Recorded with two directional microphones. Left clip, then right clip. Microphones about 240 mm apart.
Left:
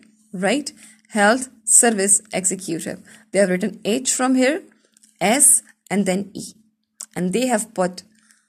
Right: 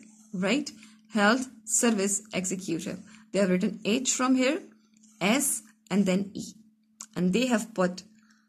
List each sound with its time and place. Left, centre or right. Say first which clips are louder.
0.3 s a woman's voice: left 7 dB; left